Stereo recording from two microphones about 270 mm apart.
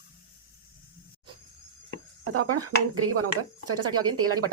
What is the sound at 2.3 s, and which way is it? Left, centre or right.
A woman's voice, right.